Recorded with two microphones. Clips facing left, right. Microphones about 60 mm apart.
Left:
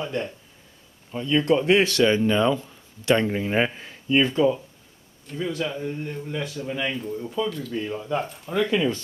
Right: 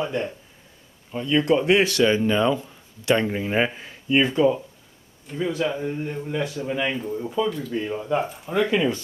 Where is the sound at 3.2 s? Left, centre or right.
Centre.